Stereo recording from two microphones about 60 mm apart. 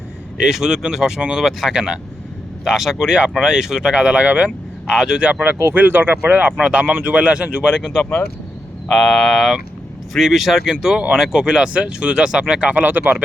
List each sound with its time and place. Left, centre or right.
0.3 s speech: centre
2.6 s speech: centre
4.9 s speech: centre
5.3 s speech: right
6.6 s speech: centre
7.8 s speech: centre
8.9 s speech: centre; by 13.2 s right